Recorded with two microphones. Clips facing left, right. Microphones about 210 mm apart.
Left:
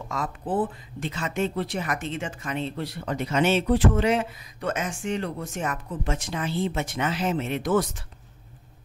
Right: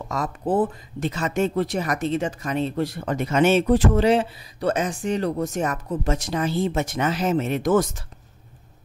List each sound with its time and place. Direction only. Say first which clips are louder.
0.1 s speech: right 5 dB; 40° right (ahead or behind)